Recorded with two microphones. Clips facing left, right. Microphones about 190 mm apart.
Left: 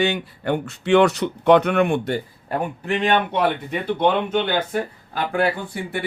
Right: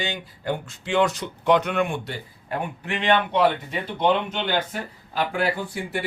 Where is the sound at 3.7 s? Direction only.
55° left (ahead or behind).